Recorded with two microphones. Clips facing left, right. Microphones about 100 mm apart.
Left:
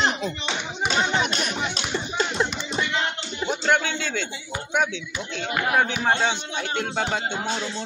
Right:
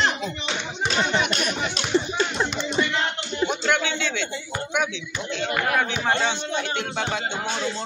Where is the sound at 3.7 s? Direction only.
40° left (ahead or behind).